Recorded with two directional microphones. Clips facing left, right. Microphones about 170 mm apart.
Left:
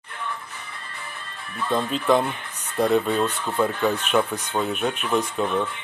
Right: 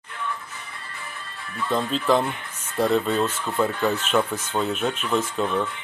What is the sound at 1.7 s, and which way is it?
Speech, centre (ahead or behind).